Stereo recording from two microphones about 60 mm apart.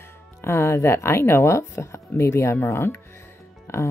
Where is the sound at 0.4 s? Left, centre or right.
Left.